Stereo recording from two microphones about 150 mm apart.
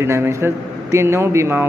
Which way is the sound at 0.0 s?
20° right (ahead or behind).